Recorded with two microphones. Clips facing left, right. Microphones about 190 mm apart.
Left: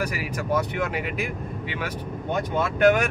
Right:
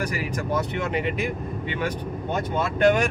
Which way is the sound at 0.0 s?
10° left (ahead or behind).